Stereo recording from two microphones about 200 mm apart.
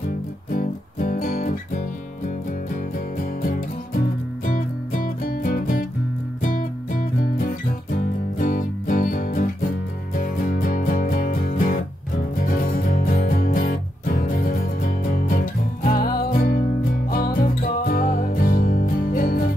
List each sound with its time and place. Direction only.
0.5 s music: 45° left (ahead or behind)